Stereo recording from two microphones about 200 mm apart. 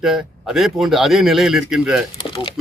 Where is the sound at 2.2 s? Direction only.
25° left (ahead or behind).